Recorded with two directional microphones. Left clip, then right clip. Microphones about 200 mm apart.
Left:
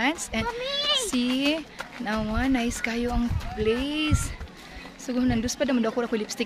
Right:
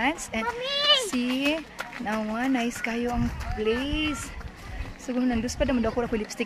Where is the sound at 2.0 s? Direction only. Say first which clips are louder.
Left 1 dB; centre (ahead or behind).